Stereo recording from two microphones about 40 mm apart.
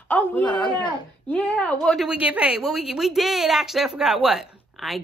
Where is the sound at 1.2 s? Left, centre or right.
Left.